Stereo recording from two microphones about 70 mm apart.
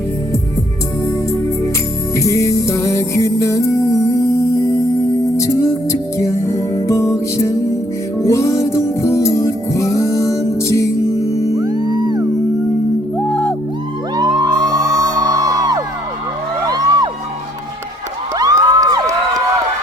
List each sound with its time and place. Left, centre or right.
2.1 s music: left
11.5 s music: right
13.1 s music: centre
14.2 s whoop: right
16.6 s music: right
18.3 s a sound: right